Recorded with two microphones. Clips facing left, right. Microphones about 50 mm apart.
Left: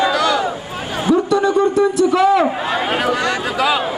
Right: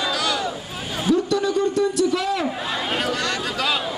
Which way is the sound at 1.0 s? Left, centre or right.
Centre.